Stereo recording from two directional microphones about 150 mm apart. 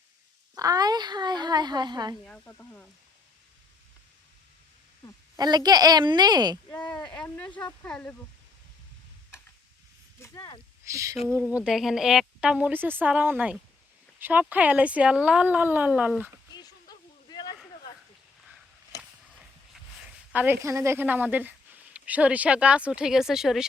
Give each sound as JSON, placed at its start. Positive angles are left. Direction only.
{"t": 0.5, "sound": "speech", "side_deg": -25}
{"t": 2.4, "sound": "speech", "side_deg": 15}
{"t": 5.4, "sound": "speech", "side_deg": -25}
{"t": 7.0, "sound": "speech", "side_deg": 5}
{"t": 10.2, "sound": "a sound", "side_deg": 20}
{"t": 10.8, "sound": "speech", "side_deg": -20}
{"t": 16.5, "sound": "a sound", "side_deg": 25}
{"t": 20.3, "sound": "speech", "side_deg": -10}